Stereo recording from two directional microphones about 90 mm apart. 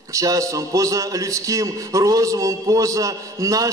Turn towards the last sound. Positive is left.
turn(degrees=-40)  # may be behind; listen again after turning